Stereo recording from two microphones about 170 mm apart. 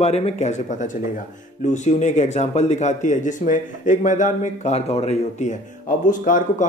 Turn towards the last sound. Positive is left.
turn(degrees=50)  # may be behind; listen again after turning